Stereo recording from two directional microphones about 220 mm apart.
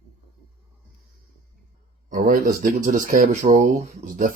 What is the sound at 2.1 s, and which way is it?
Speech, 35° right (ahead or behind).